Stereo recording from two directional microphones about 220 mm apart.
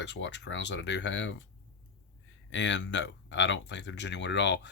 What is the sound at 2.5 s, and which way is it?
Speech, 55° left (ahead or behind).